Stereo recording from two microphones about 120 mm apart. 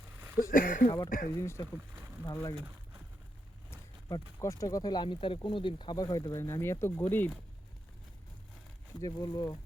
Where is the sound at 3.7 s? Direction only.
25° left (ahead or behind).